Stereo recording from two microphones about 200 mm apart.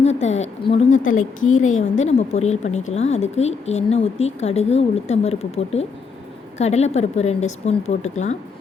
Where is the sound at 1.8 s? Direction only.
35° left (ahead or behind).